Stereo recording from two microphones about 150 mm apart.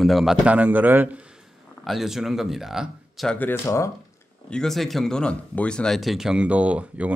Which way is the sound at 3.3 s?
15° left (ahead or behind).